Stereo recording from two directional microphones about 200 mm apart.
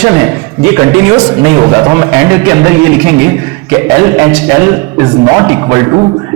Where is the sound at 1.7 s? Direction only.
15° right (ahead or behind).